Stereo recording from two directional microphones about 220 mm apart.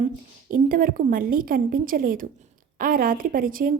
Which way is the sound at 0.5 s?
40° right (ahead or behind).